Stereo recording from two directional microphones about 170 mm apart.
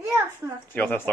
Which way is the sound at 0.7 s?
10° left (ahead or behind).